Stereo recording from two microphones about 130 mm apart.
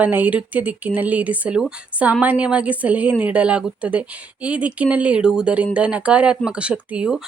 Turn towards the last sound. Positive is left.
turn(degrees=-5)  # may be behind; listen again after turning